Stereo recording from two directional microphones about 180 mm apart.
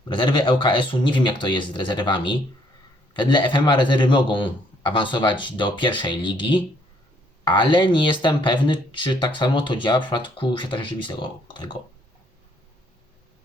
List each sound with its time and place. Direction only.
0.1 s speech: 25° left (ahead or behind)